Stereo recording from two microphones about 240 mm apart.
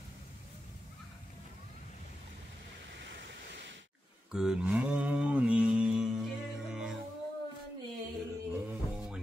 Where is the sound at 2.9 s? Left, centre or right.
Right.